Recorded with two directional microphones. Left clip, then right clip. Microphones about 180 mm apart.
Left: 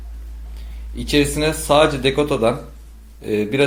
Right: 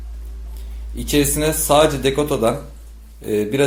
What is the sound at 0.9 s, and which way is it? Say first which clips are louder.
A man's voice: left 1 dB; 5° right (ahead or behind).